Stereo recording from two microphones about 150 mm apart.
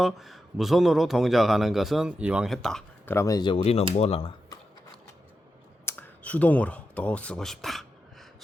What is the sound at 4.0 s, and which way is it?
Speech, 40° left (ahead or behind).